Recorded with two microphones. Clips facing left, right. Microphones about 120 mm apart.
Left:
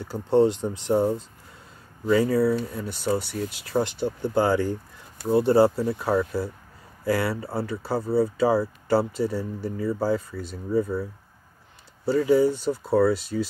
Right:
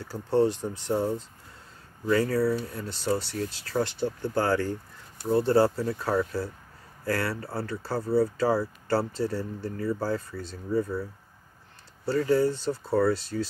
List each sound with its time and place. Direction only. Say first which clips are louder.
0.1 s speech: left 4 dB; 20° left (ahead or behind)
12.1 s speech: left 4 dB; 10° left (ahead or behind)